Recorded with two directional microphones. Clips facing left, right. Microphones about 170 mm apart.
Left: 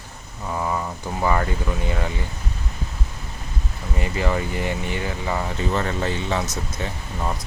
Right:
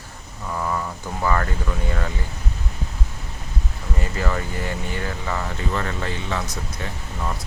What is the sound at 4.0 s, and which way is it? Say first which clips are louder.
Speech: left 3 dB; 15° left (ahead or behind).